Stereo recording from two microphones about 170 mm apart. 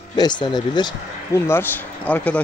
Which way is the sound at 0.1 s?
25° left (ahead or behind).